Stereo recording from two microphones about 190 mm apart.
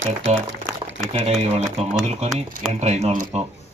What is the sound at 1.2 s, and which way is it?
Speech, 35° right (ahead or behind).